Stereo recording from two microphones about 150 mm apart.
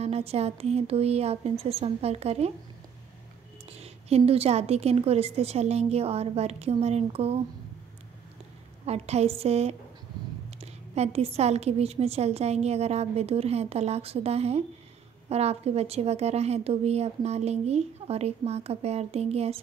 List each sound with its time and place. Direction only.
0.0 s a woman's voice: 45° right (ahead or behind)
3.7 s a woman's voice: 40° right (ahead or behind)
8.8 s a woman's voice: 45° right (ahead or behind)